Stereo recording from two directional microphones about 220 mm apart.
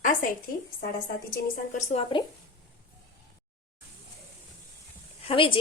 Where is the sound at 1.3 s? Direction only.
40° left (ahead or behind).